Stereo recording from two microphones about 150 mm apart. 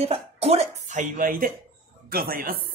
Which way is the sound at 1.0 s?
70° right (ahead or behind).